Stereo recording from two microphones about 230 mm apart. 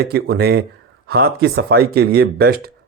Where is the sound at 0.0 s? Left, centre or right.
Right.